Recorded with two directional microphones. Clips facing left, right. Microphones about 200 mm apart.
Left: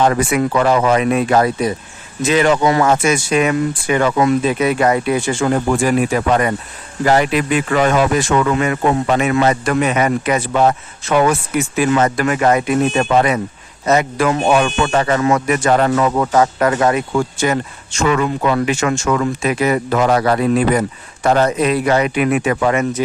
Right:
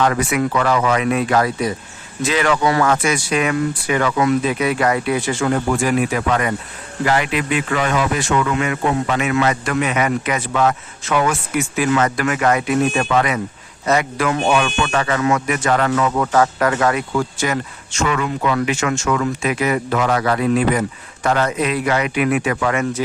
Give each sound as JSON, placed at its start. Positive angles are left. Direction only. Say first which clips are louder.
{"t": 0.0, "sound": "speech", "louder": "left 3 dB", "side_deg": 30}